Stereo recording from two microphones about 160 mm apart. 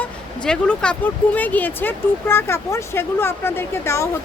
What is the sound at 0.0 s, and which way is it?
Speech, 5° left (ahead or behind).